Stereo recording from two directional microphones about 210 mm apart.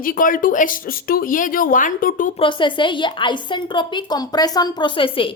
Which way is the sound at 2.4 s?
25° left (ahead or behind).